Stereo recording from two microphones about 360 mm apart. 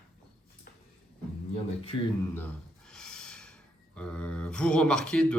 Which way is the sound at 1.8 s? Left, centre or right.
Centre.